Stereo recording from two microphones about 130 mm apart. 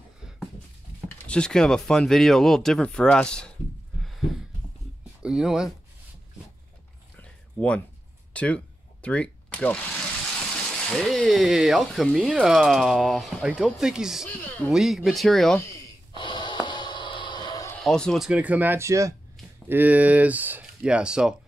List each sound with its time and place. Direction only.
1.0 s speech: 10° left (ahead or behind)
5.2 s speech: 5° right (ahead or behind)
7.2 s a sound: 10° left (ahead or behind)
10.7 s speech: 5° left (ahead or behind)
16.2 s snort: 35° left (ahead or behind)
17.7 s speech: 5° left (ahead or behind)
18.3 s speech: 10° right (ahead or behind)
19.7 s speech: 10° right (ahead or behind)